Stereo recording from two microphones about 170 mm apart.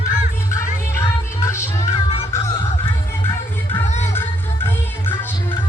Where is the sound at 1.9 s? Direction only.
35° left (ahead or behind).